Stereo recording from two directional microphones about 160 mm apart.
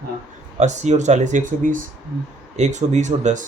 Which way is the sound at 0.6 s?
45° right (ahead or behind).